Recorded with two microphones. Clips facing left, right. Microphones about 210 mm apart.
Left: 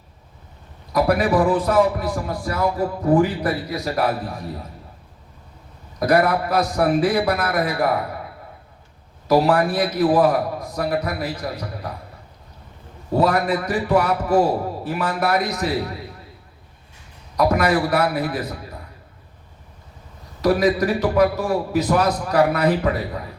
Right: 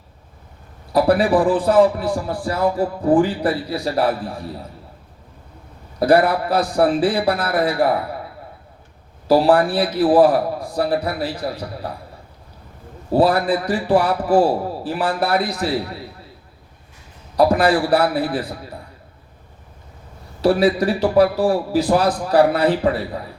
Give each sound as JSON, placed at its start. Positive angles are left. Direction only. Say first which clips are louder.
{"t": 0.9, "sound": "a man's voice", "louder": "right 2 dB", "side_deg": -30}
{"t": 6.0, "sound": "a man's voice", "louder": "right 3 dB", "side_deg": -30}
{"t": 9.2, "sound": "a man's voice", "louder": "right 3 dB", "side_deg": -30}
{"t": 13.1, "sound": "a man's voice", "louder": "right 3 dB", "side_deg": -30}
{"t": 17.3, "sound": "a man's voice", "louder": "right 3 dB", "side_deg": -30}
{"t": 20.4, "sound": "a man's voice", "louder": "right 2 dB", "side_deg": -30}